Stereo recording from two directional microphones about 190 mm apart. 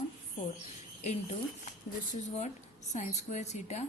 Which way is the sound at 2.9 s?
40° left (ahead or behind).